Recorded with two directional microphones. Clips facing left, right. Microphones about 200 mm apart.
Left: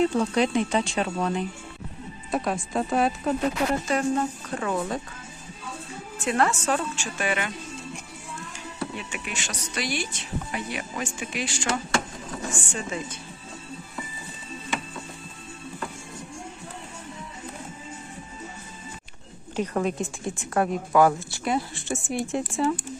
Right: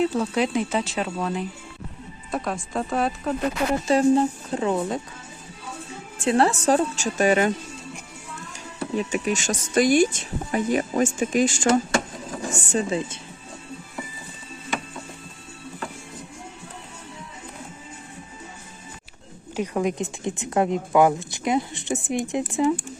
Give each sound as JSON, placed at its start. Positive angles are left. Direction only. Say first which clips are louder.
{"t": 0.0, "sound": "speech", "louder": "even", "side_deg": -5}
{"t": 3.8, "sound": "speech", "louder": "right 6 dB", "side_deg": -30}
{"t": 6.1, "sound": "a woman's voice", "louder": "right 4 dB", "side_deg": -30}
{"t": 9.0, "sound": "a woman's voice", "louder": "right 11 dB", "side_deg": -40}
{"t": 19.5, "sound": "a woman's voice", "louder": "right 1 dB", "side_deg": -10}